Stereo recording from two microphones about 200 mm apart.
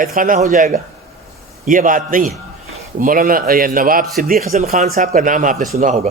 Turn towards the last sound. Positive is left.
turn(degrees=-35)  # may be behind; listen again after turning